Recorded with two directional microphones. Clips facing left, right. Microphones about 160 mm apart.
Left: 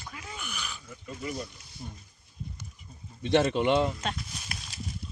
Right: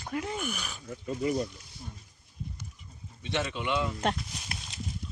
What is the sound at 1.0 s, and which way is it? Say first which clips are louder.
Speech: right 7 dB; 30° right (ahead or behind).